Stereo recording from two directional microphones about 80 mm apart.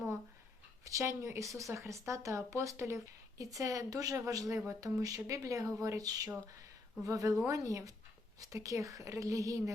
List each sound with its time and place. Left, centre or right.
0.9 s speech: right